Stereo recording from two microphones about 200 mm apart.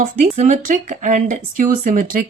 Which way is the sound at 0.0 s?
40° right (ahead or behind).